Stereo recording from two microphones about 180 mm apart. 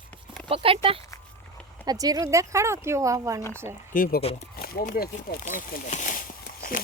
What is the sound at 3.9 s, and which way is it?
Speech, 55° left (ahead or behind).